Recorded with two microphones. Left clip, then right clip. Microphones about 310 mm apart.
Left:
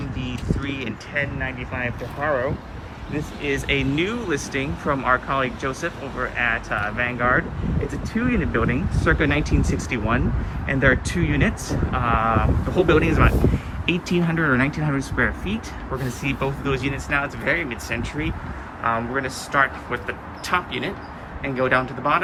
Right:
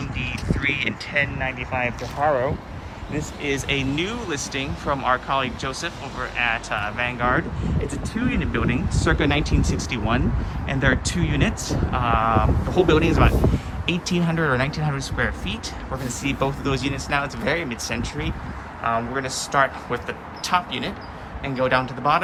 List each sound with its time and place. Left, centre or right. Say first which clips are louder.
0.2 s vehicle: right 5 dB; centre
2.2 s speech: right 2 dB; centre